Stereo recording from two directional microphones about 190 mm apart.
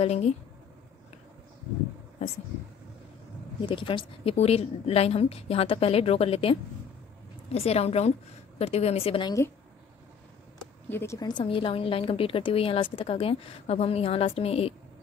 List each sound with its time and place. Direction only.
0.0 s a woman's voice: 35° left (ahead or behind)
3.6 s a woman's voice: 25° left (ahead or behind)
10.9 s a woman's voice: 15° left (ahead or behind); by 14.7 s 30° left (ahead or behind)